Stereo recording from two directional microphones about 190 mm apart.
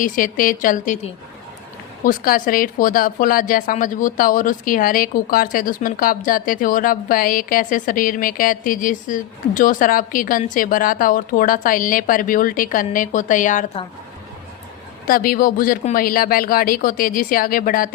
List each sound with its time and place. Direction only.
0.0 s a woman's voice: 45° left (ahead or behind)
2.0 s a woman's voice: 50° left (ahead or behind)
15.0 s a woman's voice: 50° left (ahead or behind)